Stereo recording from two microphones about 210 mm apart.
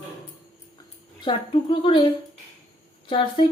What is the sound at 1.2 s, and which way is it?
Speech, 25° left (ahead or behind).